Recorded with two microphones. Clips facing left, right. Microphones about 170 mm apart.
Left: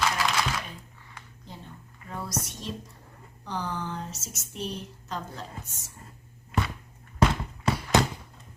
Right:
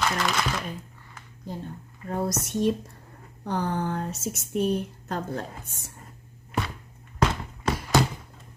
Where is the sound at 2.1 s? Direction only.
45° right (ahead or behind).